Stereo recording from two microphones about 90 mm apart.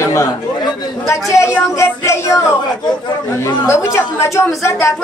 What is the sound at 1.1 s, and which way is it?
Speech, 35° left (ahead or behind).